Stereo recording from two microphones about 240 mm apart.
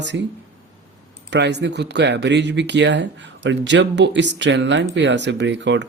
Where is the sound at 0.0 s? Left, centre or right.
Right.